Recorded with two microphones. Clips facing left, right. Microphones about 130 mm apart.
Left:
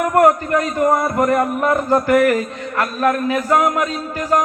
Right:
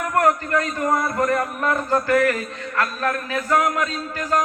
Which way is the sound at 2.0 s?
20° left (ahead or behind).